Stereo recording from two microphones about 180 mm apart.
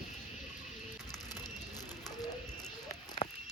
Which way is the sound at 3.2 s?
30° left (ahead or behind).